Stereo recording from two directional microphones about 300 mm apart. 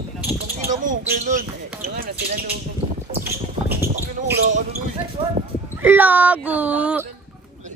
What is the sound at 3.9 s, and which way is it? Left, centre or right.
Speech, right.